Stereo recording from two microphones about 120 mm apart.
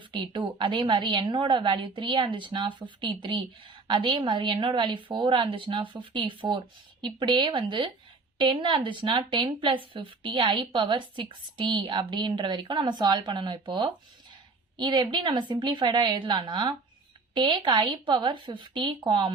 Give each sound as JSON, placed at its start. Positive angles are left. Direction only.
{"t": 0.1, "sound": "a woman's voice", "side_deg": -45}